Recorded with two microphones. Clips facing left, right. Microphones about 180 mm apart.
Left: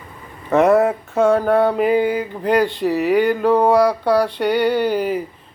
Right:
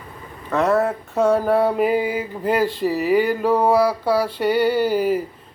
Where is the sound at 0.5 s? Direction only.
20° left (ahead or behind).